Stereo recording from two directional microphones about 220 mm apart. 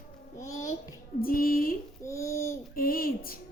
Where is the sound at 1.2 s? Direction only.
40° left (ahead or behind).